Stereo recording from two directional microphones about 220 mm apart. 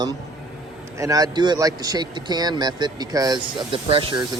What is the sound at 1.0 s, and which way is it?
Speech, 15° right (ahead or behind).